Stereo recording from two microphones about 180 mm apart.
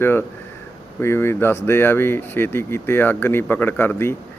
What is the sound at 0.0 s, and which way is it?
Speech, 10° left (ahead or behind).